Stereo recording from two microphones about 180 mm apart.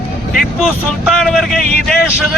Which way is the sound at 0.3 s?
Centre (ahead or behind).